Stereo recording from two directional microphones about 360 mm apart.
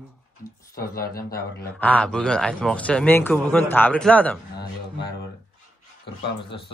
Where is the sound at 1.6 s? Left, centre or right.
Centre.